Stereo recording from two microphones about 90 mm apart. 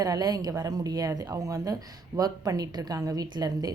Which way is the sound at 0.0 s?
45° right (ahead or behind).